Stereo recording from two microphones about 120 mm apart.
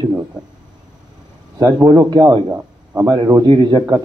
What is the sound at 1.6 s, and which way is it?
Speech, 35° right (ahead or behind).